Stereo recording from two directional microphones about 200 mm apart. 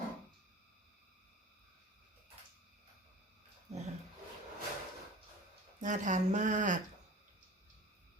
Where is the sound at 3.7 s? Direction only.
35° right (ahead or behind).